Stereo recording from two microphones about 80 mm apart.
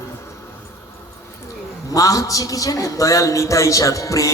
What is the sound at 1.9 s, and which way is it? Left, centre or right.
A man's voice, left.